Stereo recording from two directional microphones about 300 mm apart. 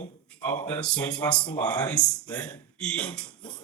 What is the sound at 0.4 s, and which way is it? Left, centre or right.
Speech, centre.